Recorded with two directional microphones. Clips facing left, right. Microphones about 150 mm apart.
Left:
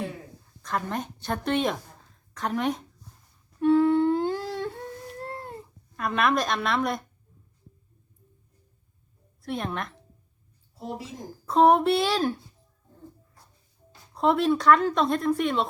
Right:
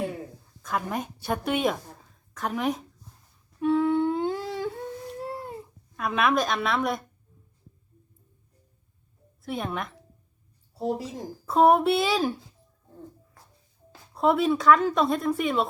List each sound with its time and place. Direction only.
0.6 s a woman's voice: 5° right (ahead or behind)
3.6 s humming: centre (ahead or behind)
9.4 s speech: centre (ahead or behind)
10.8 s speech: 40° right (ahead or behind)
11.4 s speech: 5° right (ahead or behind)
14.1 s speech: centre (ahead or behind)